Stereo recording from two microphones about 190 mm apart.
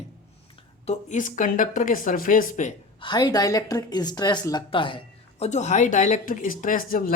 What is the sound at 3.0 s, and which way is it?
Speech, 25° left (ahead or behind).